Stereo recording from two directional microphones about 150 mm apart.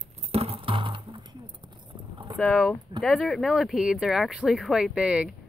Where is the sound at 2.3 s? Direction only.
10° left (ahead or behind); by 5.3 s 5° right (ahead or behind).